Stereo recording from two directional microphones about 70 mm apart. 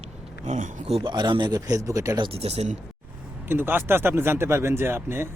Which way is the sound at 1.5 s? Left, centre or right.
Right.